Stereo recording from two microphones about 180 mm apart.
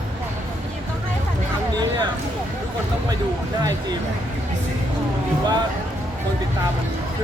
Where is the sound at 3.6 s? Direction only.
20° right (ahead or behind).